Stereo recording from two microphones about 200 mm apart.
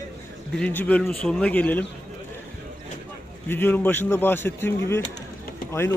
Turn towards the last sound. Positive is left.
turn(degrees=15)  # may be behind; listen again after turning